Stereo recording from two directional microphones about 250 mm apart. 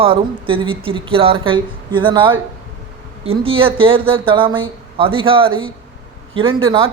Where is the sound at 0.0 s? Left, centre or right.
Right.